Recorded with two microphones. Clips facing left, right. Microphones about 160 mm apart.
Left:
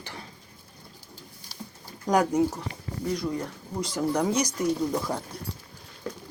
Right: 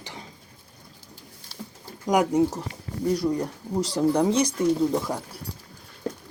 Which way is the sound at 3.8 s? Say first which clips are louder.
Right 4 dB; 30° right (ahead or behind).